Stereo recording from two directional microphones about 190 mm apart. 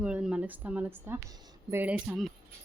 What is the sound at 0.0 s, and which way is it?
Speech, 5° right (ahead or behind).